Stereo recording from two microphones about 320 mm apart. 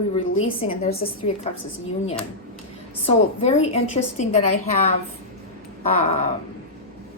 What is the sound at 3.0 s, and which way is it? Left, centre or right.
A woman's voice, centre.